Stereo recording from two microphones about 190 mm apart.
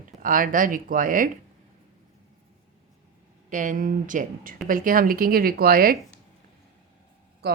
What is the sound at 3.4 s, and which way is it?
Speech, 40° right (ahead or behind).